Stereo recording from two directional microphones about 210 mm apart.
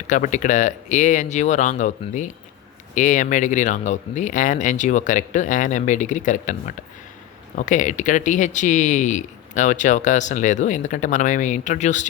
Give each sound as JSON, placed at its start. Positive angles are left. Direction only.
{"t": 0.1, "sound": "speech", "side_deg": 35}